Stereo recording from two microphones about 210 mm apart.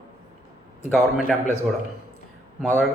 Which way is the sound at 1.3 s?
Centre (ahead or behind).